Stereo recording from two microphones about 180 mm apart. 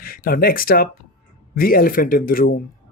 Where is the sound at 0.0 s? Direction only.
55° left (ahead or behind).